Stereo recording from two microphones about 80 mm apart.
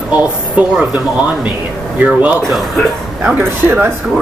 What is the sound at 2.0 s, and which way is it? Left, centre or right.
Speech, centre.